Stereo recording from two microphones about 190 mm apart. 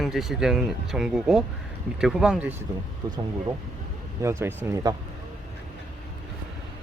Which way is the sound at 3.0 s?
20° right (ahead or behind).